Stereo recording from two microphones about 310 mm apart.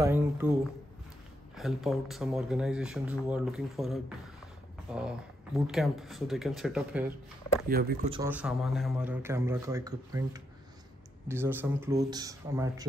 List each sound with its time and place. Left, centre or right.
0.0 s a man's voice: centre
1.6 s speech: centre
7.6 s speech: right
8.1 s a man's voice: centre